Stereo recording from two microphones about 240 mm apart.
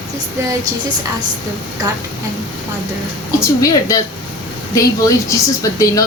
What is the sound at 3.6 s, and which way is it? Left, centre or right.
Speech, centre.